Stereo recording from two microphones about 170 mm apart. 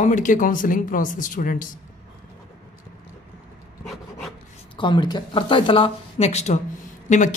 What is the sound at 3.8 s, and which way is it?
Rub, centre (ahead or behind).